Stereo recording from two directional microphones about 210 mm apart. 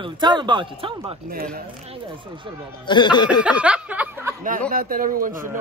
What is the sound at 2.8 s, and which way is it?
Speech, 20° left (ahead or behind).